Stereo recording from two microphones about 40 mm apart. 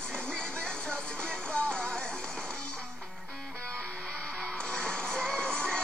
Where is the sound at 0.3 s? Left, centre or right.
Left.